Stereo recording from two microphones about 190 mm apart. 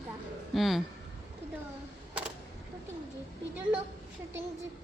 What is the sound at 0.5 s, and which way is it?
Speech, centre (ahead or behind).